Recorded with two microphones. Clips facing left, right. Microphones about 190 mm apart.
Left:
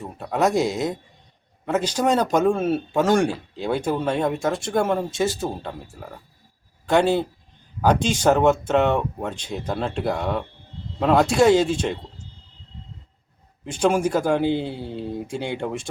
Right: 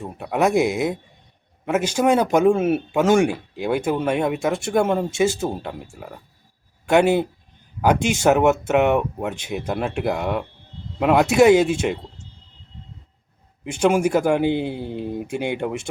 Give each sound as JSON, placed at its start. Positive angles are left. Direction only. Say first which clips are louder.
{"t": 0.0, "sound": "speech", "louder": "right 1 dB", "side_deg": -15}
{"t": 1.6, "sound": "speech", "louder": "right 2 dB", "side_deg": -10}
{"t": 13.7, "sound": "speech", "louder": "right 2 dB", "side_deg": -10}